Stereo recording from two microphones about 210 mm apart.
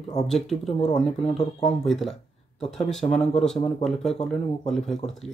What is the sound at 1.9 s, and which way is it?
Speech, centre (ahead or behind).